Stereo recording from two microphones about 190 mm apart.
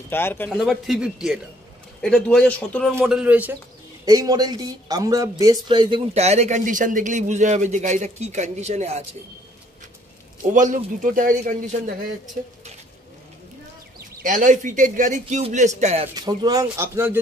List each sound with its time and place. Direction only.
0.1 s speech: 10° left (ahead or behind)
0.6 s a man's voice: centre (ahead or behind)
3.1 s a man's voice: 5° right (ahead or behind)
4.0 s speech: 20° right (ahead or behind); by 9.0 s 35° right (ahead or behind)
10.4 s a man's voice: 40° right (ahead or behind)
13.9 s speech: 45° right (ahead or behind)
16.2 s a man's voice: 20° right (ahead or behind)